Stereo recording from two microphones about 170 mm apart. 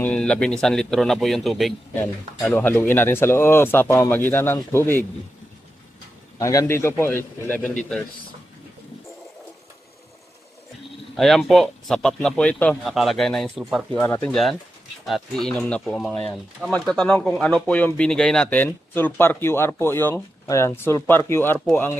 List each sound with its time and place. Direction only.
0.0 s speech: 5° left (ahead or behind)
2.5 s speech: 10° left (ahead or behind)
6.4 s speech: 20° left (ahead or behind)
11.2 s speech: centre (ahead or behind)
14.0 s speech: 10° left (ahead or behind)